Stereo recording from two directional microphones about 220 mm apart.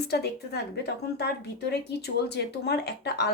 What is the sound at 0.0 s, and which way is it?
A woman's voice, 45° left (ahead or behind).